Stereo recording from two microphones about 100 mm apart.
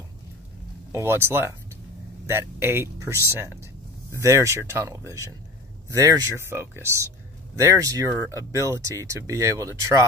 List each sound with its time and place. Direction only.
0.9 s speech: 25° right (ahead or behind)